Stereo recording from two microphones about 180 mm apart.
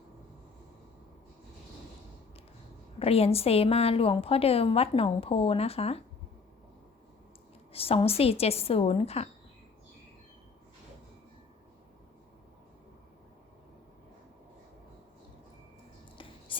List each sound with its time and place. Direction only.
3.0 s a woman's voice: 35° left (ahead or behind)
7.7 s a woman's voice: 30° left (ahead or behind)
16.1 s a sound: 30° left (ahead or behind)